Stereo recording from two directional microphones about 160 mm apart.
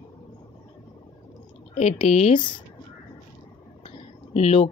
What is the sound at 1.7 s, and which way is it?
Speech, 45° left (ahead or behind).